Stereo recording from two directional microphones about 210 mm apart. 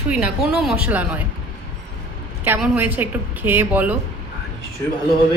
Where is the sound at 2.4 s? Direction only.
10° right (ahead or behind).